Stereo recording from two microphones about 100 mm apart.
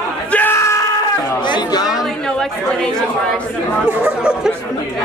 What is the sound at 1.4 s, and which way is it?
Speech, 45° left (ahead or behind).